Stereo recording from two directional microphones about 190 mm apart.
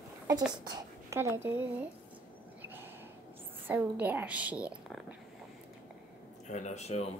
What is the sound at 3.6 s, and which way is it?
A woman's voice, 10° right (ahead or behind).